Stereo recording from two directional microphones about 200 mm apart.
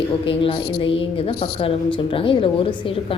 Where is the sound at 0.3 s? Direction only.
25° left (ahead or behind).